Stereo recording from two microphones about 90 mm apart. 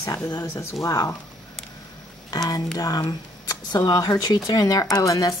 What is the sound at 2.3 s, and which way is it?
A woman's voice, 45° left (ahead or behind).